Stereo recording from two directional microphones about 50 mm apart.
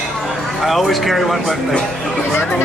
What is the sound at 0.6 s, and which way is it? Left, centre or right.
Speech, centre.